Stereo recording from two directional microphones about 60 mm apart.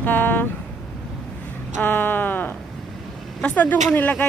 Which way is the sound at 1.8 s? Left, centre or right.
Left.